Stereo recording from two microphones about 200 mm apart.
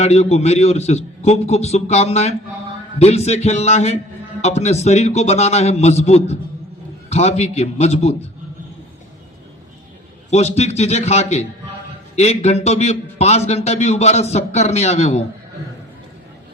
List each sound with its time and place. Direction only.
0.0 s a man's voice: 30° left (ahead or behind)
10.2 s a man's voice: 35° left (ahead or behind)